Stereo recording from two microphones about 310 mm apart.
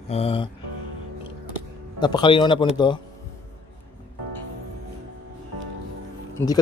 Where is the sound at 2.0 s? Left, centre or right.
Centre.